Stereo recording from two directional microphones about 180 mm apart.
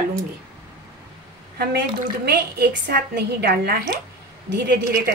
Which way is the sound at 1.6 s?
60° right (ahead or behind).